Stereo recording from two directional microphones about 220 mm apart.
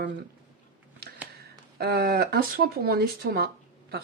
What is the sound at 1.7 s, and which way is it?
Speech, 45° right (ahead or behind).